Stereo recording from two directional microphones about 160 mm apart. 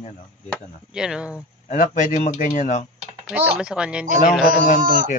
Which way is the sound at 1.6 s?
55° left (ahead or behind).